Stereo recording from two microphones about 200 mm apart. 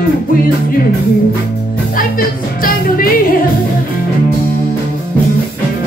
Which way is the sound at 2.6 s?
45° left (ahead or behind).